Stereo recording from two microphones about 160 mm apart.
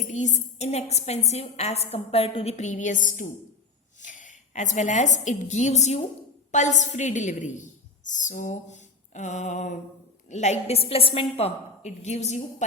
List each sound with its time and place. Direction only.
0.3 s a woman's voice: 45° left (ahead or behind)